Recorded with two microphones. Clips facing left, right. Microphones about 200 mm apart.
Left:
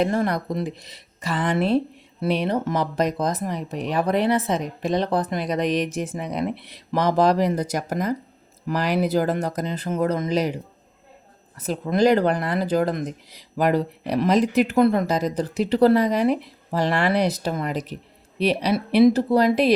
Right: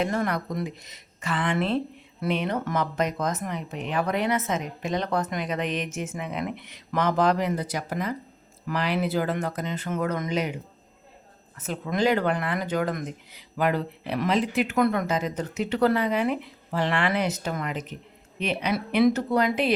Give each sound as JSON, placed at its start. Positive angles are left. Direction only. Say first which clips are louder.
{"t": 0.0, "sound": "speech", "louder": "left 4 dB", "side_deg": 35}
{"t": 11.6, "sound": "speech", "louder": "left 5 dB", "side_deg": 35}